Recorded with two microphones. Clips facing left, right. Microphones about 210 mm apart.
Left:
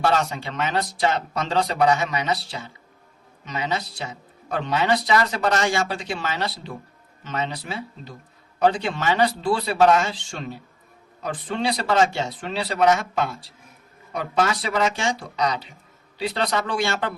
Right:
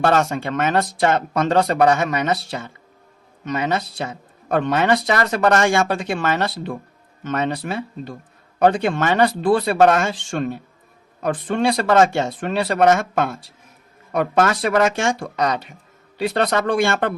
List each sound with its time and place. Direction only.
0.0 s speech: 55° right (ahead or behind)